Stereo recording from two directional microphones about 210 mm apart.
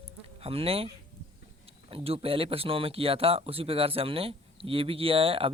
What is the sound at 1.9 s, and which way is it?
Speech, 25° right (ahead or behind).